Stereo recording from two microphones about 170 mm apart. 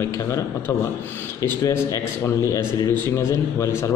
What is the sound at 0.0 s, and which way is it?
A man's voice, 15° left (ahead or behind).